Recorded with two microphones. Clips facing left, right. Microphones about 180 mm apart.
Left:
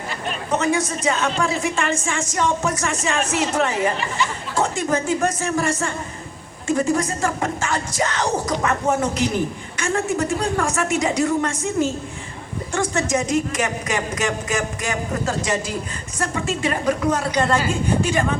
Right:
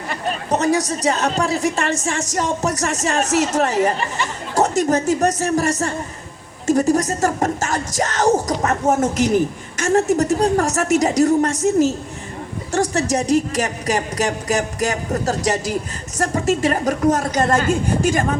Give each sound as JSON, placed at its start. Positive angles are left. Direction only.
{"t": 0.3, "sound": "a man's voice", "side_deg": -40}